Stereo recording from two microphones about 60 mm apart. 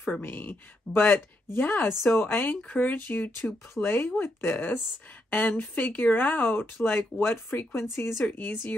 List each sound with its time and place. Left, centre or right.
0.1 s speech: left
2.5 s speech: left